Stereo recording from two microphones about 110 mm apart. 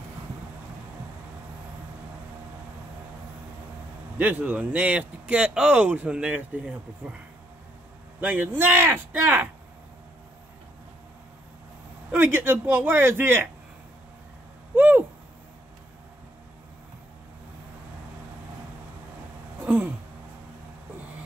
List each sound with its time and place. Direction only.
4.2 s speech: 15° right (ahead or behind)
8.2 s speech: 15° right (ahead or behind)
12.1 s speech: 20° right (ahead or behind)
14.8 s owl: 15° right (ahead or behind)
19.6 s a sound: 10° right (ahead or behind)